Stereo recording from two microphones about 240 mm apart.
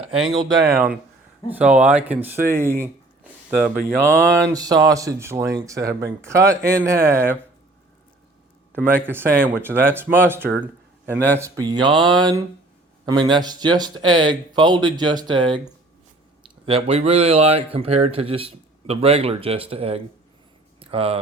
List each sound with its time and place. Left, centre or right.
0.2 s speech: centre
5.8 s speech: right
6.2 s speech: centre
8.7 s speech: centre; by 20.0 s right
20.7 s a sound: right